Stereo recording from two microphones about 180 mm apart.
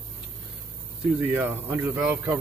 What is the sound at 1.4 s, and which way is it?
Speech, 10° right (ahead or behind).